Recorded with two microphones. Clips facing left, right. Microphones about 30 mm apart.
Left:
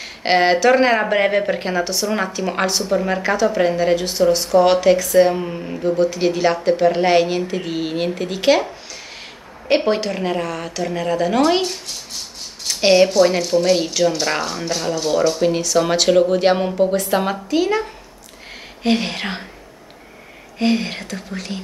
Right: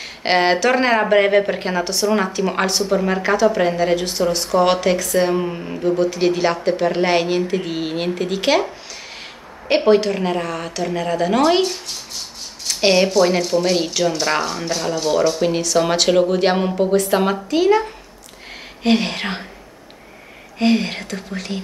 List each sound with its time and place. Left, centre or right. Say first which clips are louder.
0.0 s a woman's voice: left 1 dB; centre
20.5 s a woman's voice: right 2 dB; centre